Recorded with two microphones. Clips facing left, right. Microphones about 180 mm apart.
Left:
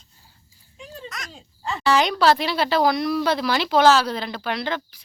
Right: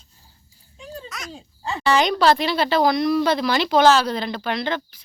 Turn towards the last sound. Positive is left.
turn(degrees=5)  # may be behind; listen again after turning